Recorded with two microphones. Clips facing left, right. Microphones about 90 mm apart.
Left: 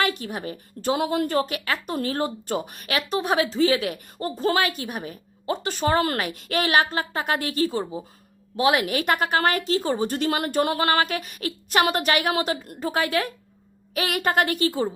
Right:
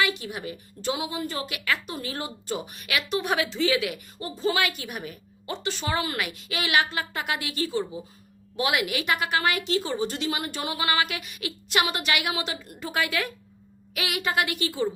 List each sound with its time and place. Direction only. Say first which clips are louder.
0.0 s a woman's voice: left 2 dB; 45° left (ahead or behind)
1.9 s a woman's voice: left 8 dB; 50° left (ahead or behind)
4.6 s a woman's voice: left 3 dB; 35° left (ahead or behind)